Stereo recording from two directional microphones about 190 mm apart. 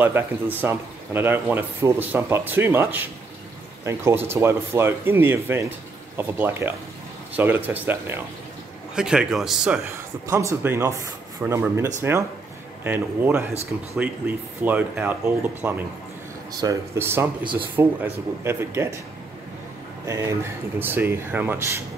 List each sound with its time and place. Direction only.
0.0 s a man's voice: 10° right (ahead or behind)
10.3 s speech: 15° right (ahead or behind)
20.1 s speech: 15° right (ahead or behind)